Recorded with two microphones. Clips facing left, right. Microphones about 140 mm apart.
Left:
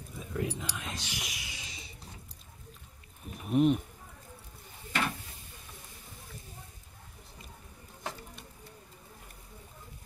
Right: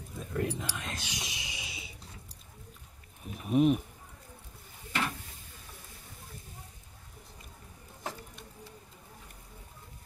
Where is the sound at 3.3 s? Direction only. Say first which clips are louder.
Even; 5° right (ahead or behind).